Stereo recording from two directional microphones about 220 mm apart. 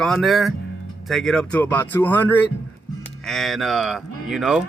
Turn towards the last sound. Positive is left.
turn(degrees=-5)  # may be behind; listen again after turning